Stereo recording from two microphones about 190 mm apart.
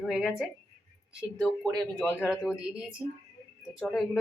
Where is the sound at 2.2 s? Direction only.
Centre (ahead or behind).